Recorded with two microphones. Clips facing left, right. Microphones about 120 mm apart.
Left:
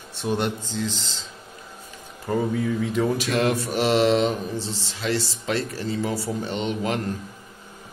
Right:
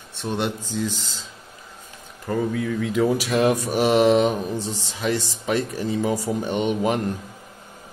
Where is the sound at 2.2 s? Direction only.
5° left (ahead or behind); by 7.0 s 15° right (ahead or behind).